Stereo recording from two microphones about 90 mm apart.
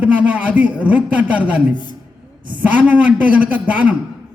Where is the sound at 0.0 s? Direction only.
15° right (ahead or behind).